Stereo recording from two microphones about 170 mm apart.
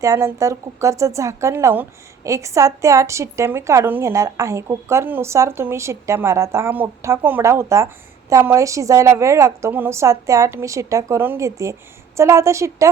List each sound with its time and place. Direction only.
0.0 s speech: 20° right (ahead or behind)